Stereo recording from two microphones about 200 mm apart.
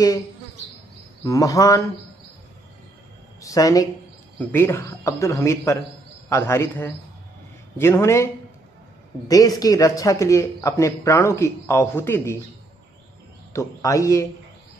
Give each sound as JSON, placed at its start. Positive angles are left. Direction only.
{"t": 1.2, "sound": "a man's voice", "side_deg": 15}
{"t": 3.3, "sound": "a man's voice", "side_deg": 15}
{"t": 9.3, "sound": "a man's voice", "side_deg": 15}
{"t": 13.5, "sound": "a man's voice", "side_deg": 15}